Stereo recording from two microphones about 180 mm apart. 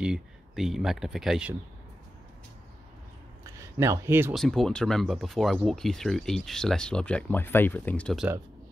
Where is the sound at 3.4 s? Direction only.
15° right (ahead or behind).